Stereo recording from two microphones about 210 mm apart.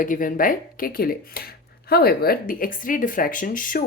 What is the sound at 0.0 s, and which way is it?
Speech, 40° left (ahead or behind).